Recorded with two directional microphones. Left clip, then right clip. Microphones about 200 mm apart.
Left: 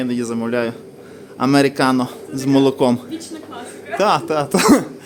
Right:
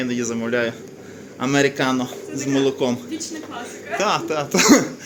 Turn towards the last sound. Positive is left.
turn(degrees=30)  # may be behind; listen again after turning